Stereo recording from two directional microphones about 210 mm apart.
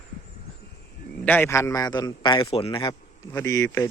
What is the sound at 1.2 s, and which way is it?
A man's voice, 10° left (ahead or behind).